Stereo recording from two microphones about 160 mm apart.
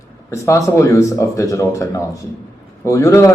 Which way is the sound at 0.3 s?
20° left (ahead or behind).